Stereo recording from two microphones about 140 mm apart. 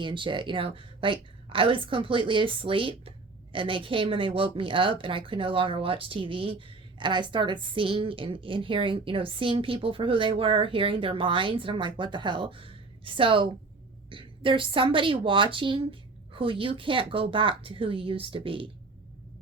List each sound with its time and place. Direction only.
0.0 s a woman's voice: 35° right (ahead or behind)